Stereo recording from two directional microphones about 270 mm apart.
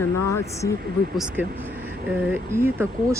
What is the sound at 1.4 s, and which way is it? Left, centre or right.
Speech, centre.